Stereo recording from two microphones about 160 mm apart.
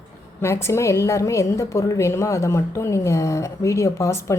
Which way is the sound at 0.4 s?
15° left (ahead or behind).